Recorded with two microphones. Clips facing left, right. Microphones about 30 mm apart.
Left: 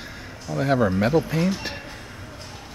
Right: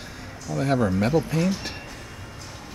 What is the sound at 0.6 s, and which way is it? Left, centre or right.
Speech, centre.